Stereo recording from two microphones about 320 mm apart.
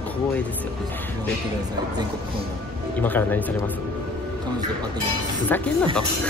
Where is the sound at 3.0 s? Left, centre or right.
Centre.